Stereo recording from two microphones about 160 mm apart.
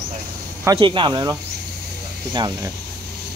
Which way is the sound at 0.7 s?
30° right (ahead or behind).